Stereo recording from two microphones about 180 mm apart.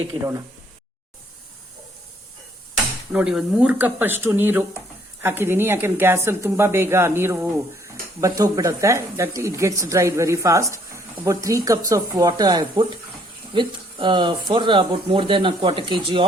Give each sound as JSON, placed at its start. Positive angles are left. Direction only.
{"t": 3.1, "sound": "a woman's voice", "side_deg": -5}